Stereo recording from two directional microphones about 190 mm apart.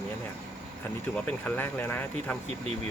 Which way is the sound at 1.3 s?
10° left (ahead or behind).